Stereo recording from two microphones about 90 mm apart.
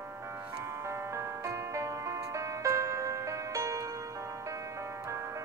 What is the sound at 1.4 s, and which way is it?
Music, 35° right (ahead or behind).